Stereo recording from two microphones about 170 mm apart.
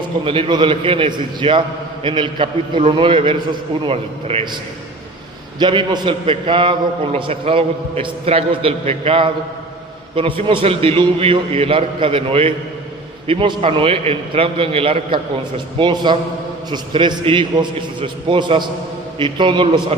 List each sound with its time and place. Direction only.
0.3 s a man's voice: 30° right (ahead or behind)
5.5 s a man's voice: 25° right (ahead or behind)